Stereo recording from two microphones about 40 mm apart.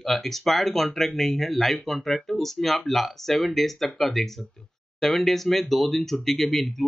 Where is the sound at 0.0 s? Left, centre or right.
Centre.